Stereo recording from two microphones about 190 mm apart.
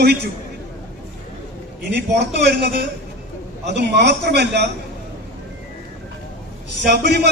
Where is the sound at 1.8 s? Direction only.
60° right (ahead or behind).